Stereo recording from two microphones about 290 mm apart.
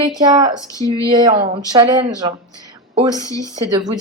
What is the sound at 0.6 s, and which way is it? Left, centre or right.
Speech, centre.